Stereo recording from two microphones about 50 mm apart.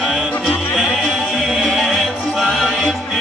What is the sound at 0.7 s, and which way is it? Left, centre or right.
Music, centre.